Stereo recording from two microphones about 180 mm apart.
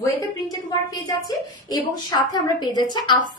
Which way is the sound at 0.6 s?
20° left (ahead or behind).